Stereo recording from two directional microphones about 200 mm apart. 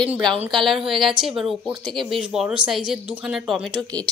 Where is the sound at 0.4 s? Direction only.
Centre (ahead or behind).